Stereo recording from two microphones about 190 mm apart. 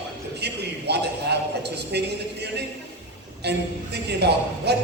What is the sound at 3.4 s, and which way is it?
A man's voice, 60° right (ahead or behind).